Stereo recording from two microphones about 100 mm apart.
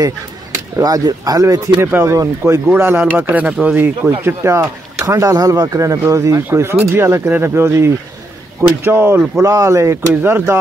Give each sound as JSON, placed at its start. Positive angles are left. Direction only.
{"t": 0.7, "sound": "speech", "side_deg": -40}
{"t": 1.9, "sound": "speech", "side_deg": -20}
{"t": 2.7, "sound": "speech", "side_deg": -20}